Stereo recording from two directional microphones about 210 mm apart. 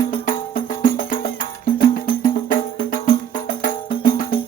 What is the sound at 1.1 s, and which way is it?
Music, 40° left (ahead or behind).